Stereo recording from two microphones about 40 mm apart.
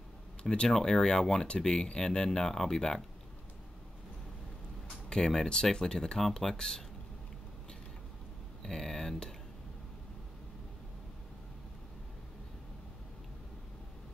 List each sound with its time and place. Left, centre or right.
0.4 s speech: left
0.7 s speech: centre
5.1 s speech: centre
8.6 s speech: centre